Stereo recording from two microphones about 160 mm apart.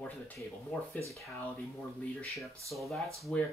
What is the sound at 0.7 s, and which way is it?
Speech, 10° left (ahead or behind).